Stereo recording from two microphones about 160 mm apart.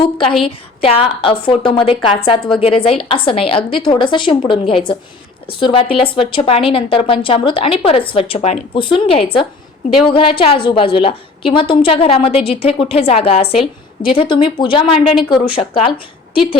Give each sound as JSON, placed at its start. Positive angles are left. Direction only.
{"t": 0.0, "sound": "a woman's voice", "side_deg": 30}